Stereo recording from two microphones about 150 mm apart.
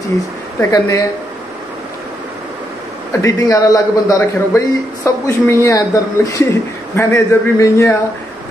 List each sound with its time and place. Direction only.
0.6 s a man's voice: 20° left (ahead or behind)
3.1 s a man's voice: 20° left (ahead or behind)